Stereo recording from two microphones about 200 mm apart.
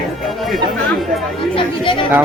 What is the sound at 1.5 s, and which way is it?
Speech, 25° left (ahead or behind).